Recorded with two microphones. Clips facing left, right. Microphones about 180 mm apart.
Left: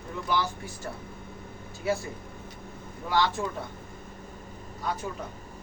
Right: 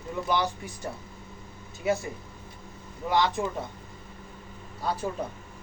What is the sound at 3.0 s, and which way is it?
Speech, 20° right (ahead or behind).